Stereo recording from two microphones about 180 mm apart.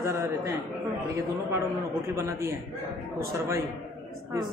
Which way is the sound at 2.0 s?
15° right (ahead or behind).